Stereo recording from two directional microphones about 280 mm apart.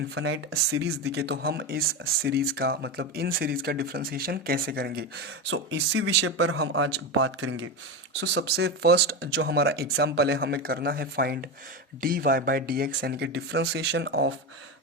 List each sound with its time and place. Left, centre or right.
0.1 s speech: right